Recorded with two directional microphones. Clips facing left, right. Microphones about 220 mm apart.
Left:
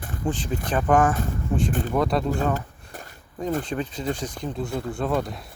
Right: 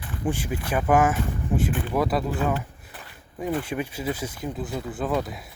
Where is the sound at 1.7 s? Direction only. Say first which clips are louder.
Left 2 dB; 40° left (ahead or behind).